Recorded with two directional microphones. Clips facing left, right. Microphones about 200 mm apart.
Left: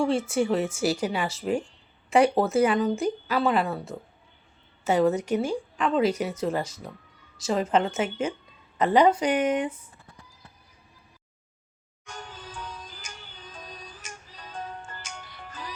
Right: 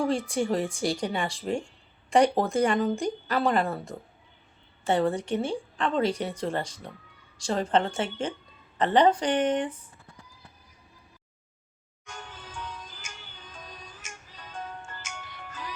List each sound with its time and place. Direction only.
0.3 s speech: 5° left (ahead or behind)
5.0 s a woman's voice: 10° left (ahead or behind)
12.0 s music: 35° left (ahead or behind)